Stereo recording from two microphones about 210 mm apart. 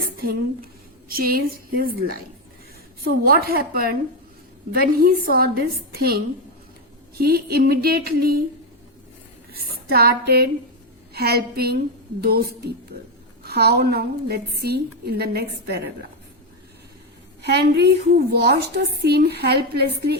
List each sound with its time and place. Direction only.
1.0 s a woman's voice: 45° right (ahead or behind)
9.5 s a woman's voice: 45° right (ahead or behind)
17.4 s a woman's voice: 50° right (ahead or behind)